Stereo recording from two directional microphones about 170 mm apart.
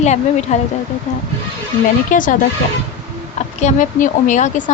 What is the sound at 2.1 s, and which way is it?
Speech, 50° left (ahead or behind).